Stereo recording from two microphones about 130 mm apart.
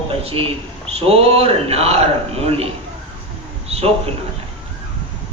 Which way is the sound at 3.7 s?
50° right (ahead or behind).